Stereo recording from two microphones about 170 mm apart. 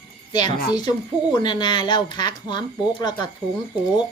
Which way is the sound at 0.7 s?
25° left (ahead or behind).